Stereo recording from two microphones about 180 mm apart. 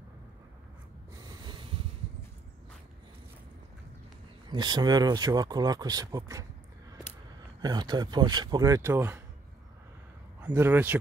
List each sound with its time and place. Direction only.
1.1 s snort: 20° right (ahead or behind)
4.5 s speech: 25° right (ahead or behind)
7.6 s speech: 25° right (ahead or behind)
10.4 s a man's voice: 10° right (ahead or behind)